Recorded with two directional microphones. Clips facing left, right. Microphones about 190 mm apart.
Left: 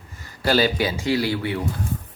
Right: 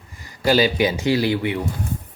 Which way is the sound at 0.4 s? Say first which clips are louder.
Right 3 dB; 15° right (ahead or behind).